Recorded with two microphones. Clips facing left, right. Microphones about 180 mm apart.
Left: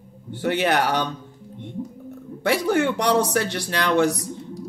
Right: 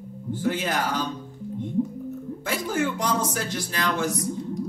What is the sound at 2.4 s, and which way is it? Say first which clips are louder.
Speech: left 6 dB; 70° left (ahead or behind).